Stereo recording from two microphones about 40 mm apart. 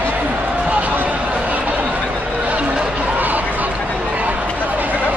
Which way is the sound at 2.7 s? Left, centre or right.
Right.